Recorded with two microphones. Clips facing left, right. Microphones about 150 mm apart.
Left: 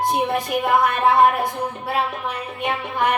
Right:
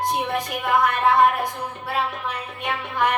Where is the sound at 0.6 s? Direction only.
30° left (ahead or behind).